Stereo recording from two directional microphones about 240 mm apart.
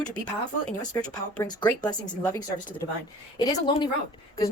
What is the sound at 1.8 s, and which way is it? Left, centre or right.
Speech, centre.